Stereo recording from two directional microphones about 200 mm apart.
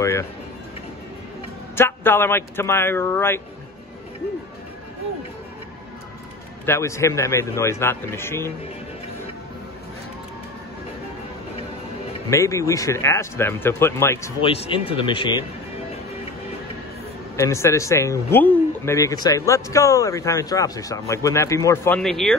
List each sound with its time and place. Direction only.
0.0 s speech: 15° left (ahead or behind)
1.8 s a man's voice: 10° left (ahead or behind)
6.6 s a man's voice: 15° left (ahead or behind)
12.3 s a man's voice: 15° left (ahead or behind)
14.4 s speech: 30° left (ahead or behind)
17.4 s a man's voice: 15° left (ahead or behind)